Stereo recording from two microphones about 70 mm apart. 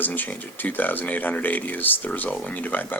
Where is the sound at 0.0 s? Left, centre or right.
Left.